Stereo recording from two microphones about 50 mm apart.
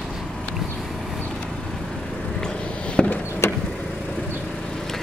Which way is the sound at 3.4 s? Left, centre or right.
Left.